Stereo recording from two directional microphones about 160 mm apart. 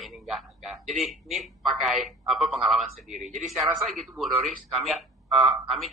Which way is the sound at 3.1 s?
50° right (ahead or behind).